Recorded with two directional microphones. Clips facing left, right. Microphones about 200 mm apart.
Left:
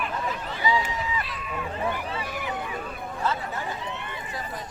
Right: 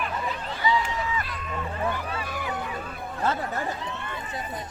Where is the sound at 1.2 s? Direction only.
Centre (ahead or behind).